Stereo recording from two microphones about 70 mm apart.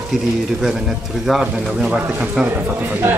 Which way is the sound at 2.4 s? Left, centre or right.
Right.